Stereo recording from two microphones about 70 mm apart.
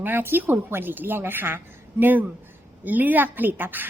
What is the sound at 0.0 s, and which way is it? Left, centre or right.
A woman's voice, right.